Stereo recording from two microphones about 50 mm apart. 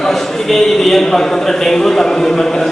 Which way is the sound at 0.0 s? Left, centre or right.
Centre.